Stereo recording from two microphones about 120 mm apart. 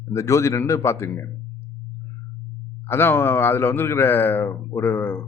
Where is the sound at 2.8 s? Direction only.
20° left (ahead or behind).